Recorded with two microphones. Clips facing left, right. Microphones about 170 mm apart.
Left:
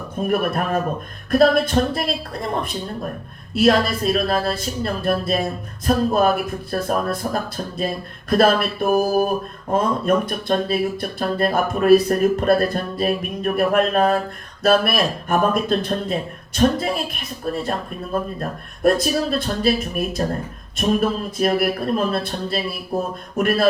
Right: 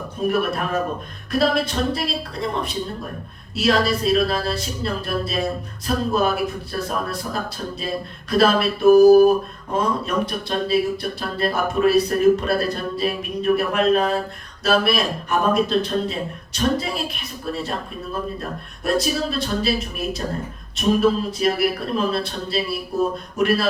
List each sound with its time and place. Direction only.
0.3 s speech: 50° left (ahead or behind)
3.5 s speech: 50° left (ahead or behind)
8.3 s speech: 50° left (ahead or behind)